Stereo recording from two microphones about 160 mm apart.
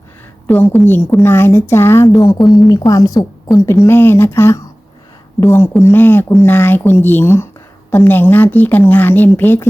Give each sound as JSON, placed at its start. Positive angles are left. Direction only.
{"t": 0.4, "sound": "a woman's voice", "side_deg": 10}
{"t": 2.4, "sound": "a woman's voice", "side_deg": 0}
{"t": 2.6, "sound": "a woman's voice", "side_deg": 20}